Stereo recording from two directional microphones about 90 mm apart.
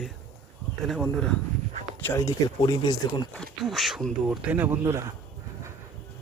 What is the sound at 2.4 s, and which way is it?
Speech, 50° left (ahead or behind).